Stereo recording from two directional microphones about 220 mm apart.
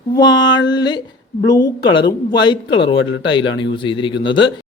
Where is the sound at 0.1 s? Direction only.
20° left (ahead or behind).